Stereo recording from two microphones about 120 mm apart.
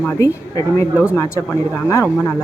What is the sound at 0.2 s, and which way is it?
Speech, 25° left (ahead or behind).